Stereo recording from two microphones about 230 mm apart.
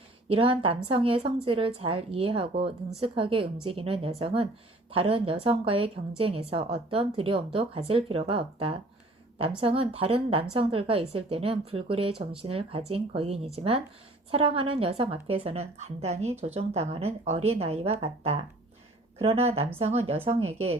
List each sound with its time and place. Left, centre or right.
0.3 s a woman's voice: right